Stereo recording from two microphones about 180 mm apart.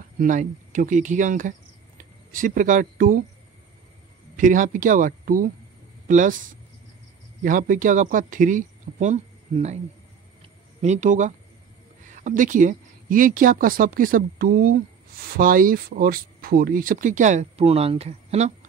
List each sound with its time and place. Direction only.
0.2 s speech: 45° right (ahead or behind)
4.4 s speech: 45° right (ahead or behind)
10.8 s speech: 40° right (ahead or behind)